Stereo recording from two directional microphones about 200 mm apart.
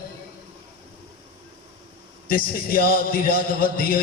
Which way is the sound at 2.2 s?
45° left (ahead or behind).